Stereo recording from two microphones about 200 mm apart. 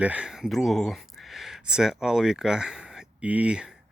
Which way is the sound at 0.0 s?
5° right (ahead or behind).